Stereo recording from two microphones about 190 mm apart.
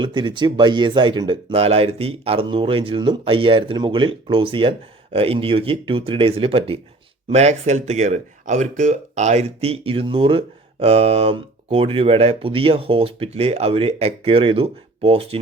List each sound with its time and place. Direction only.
0.0 s speech: 25° right (ahead or behind)